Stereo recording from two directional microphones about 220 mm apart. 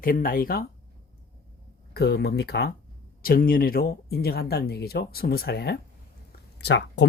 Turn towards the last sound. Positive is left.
turn(degrees=50)  # may be behind; listen again after turning